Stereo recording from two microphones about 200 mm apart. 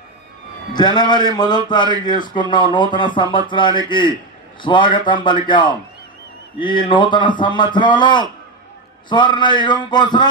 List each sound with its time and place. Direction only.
0.7 s a man's voice: 20° left (ahead or behind)